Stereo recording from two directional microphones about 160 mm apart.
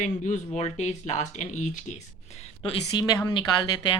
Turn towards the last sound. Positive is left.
turn(degrees=30)  # may be behind; listen again after turning